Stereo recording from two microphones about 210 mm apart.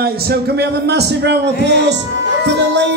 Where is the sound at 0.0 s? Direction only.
50° right (ahead or behind).